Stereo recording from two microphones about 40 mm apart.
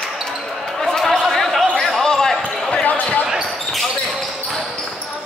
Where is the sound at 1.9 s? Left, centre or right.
Centre.